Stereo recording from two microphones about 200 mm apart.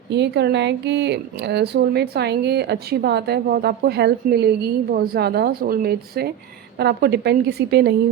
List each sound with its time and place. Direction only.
0.1 s a woman's voice: 55° right (ahead or behind)